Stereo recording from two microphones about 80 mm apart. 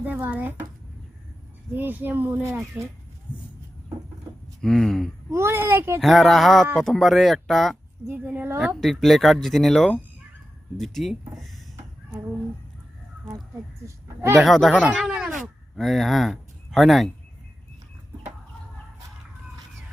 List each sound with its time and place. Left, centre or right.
0.0 s speech: right
1.7 s speech: right
2.8 s speech: centre
3.3 s a sound: left
4.6 s speech: centre
5.3 s a child's voice: right
6.0 s speech: centre
8.0 s speech: right
8.6 s speech: centre
11.3 s a sound: centre
13.8 s a man's voice: right
14.3 s speech: centre
15.1 s a sound: centre